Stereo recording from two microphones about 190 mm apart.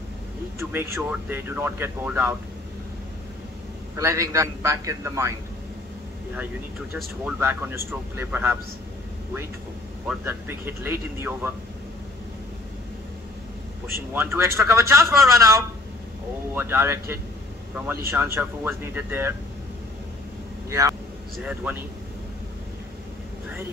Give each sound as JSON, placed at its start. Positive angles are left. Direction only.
{"t": 0.6, "sound": "speech", "side_deg": -10}
{"t": 3.9, "sound": "speech", "side_deg": -15}
{"t": 7.3, "sound": "speech", "side_deg": -10}
{"t": 10.0, "sound": "speech", "side_deg": -10}
{"t": 14.1, "sound": "speech", "side_deg": -15}